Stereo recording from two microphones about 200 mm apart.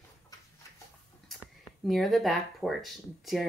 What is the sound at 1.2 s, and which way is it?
Speech, centre (ahead or behind).